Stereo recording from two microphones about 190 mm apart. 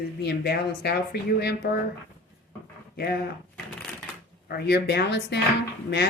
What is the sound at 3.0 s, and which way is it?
Speech, 50° left (ahead or behind).